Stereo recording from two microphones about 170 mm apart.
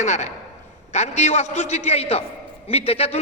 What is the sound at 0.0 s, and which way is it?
A man's voice, 45° left (ahead or behind).